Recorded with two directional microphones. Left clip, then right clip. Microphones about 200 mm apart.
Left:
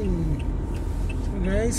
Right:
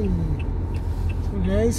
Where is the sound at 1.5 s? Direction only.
15° right (ahead or behind).